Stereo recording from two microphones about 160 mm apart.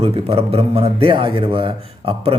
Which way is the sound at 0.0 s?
35° right (ahead or behind).